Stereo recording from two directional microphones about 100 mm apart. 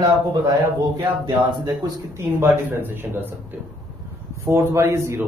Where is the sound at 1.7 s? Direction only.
25° right (ahead or behind).